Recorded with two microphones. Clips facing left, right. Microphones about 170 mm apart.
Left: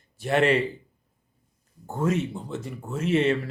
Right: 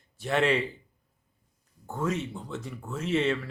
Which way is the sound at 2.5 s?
5° left (ahead or behind).